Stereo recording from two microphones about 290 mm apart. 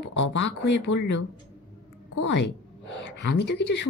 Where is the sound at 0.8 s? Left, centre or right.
Left.